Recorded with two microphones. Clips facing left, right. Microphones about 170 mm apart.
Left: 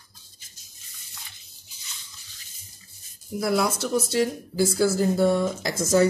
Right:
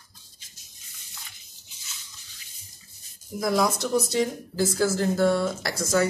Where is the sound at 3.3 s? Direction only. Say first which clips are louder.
Even; 5° left (ahead or behind).